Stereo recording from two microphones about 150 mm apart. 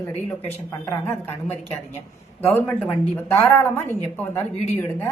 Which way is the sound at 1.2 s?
15° left (ahead or behind).